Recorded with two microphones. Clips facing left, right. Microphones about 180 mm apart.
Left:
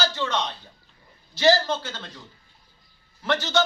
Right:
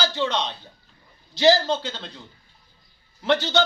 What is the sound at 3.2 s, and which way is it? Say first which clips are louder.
Speech: right 4 dB; 15° right (ahead or behind).